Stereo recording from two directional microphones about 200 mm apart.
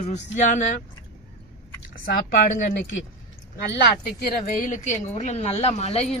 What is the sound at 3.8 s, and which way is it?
A woman's voice, 50° left (ahead or behind).